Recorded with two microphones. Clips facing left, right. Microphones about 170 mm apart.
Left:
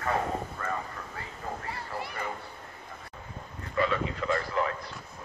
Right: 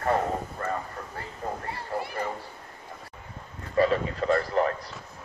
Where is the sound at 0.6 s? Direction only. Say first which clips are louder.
Right 5 dB; 45° right (ahead or behind).